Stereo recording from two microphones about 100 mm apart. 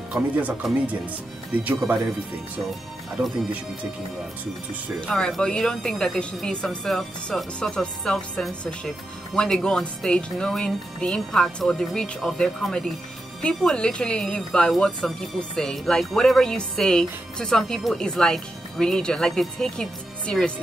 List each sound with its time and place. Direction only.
0.1 s speech: 15° right (ahead or behind)
5.0 s a woman's voice: 10° left (ahead or behind)